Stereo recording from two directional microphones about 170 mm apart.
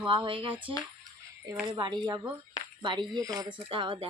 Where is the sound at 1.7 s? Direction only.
25° right (ahead or behind).